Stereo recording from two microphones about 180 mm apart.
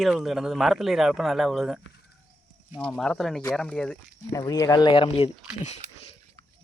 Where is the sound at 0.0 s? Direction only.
Centre (ahead or behind).